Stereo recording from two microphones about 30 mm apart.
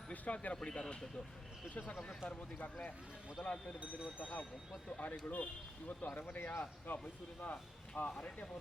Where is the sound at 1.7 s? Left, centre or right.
Left.